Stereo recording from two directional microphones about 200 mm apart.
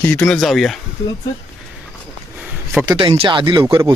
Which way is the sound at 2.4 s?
5° right (ahead or behind).